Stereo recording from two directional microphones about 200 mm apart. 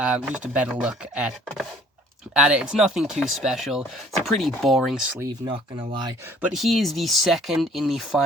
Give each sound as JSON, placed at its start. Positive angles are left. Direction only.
{"t": 0.0, "sound": "speech", "side_deg": -5}
{"t": 5.3, "sound": "speech", "side_deg": -20}
{"t": 6.4, "sound": "speech", "side_deg": 0}